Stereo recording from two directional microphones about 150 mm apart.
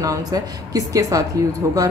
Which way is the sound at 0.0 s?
25° right (ahead or behind).